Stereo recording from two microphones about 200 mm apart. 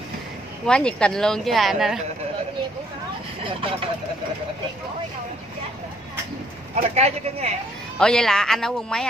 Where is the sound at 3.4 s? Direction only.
25° right (ahead or behind).